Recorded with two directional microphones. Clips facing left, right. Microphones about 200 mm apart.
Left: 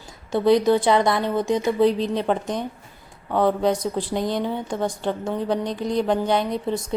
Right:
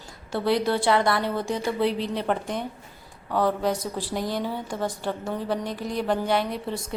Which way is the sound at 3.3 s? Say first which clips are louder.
Left 4 dB; 20° left (ahead or behind).